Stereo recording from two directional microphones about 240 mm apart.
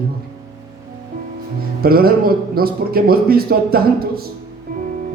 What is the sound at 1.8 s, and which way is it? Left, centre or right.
A man's voice, right.